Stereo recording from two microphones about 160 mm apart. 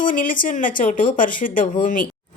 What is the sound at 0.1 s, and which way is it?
Speech, 60° left (ahead or behind).